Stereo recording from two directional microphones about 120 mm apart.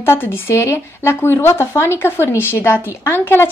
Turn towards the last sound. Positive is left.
turn(degrees=20)  # may be behind; listen again after turning